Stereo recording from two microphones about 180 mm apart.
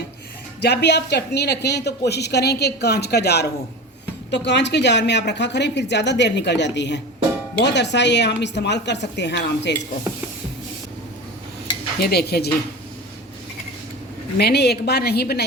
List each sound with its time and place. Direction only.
0.6 s speech: 65° left (ahead or behind)
11.9 s a woman's voice: 60° left (ahead or behind)
14.3 s a woman's voice: 65° left (ahead or behind)